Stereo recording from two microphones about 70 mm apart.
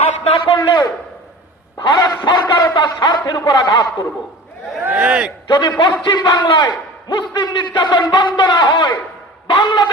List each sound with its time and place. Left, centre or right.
0.5 s a man's voice: left
4.9 s a man's voice: centre
5.5 s a man's voice: left